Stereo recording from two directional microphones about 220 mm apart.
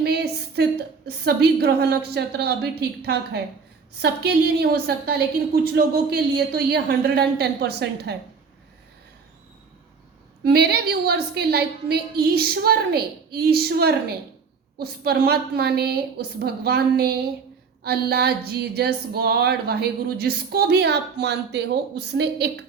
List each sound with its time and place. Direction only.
0.0 s speech: 50° right (ahead or behind)
10.4 s speech: 45° right (ahead or behind)